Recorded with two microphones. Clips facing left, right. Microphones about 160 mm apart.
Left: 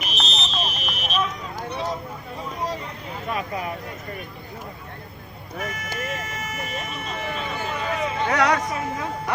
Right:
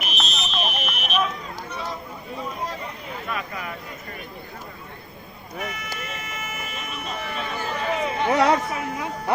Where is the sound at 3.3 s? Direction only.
30° left (ahead or behind).